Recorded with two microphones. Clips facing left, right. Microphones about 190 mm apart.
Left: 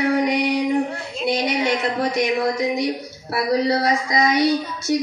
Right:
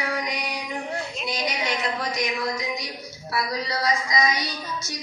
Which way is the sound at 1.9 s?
55° left (ahead or behind).